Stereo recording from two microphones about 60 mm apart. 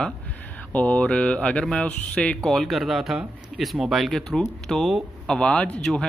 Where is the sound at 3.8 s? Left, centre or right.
Centre.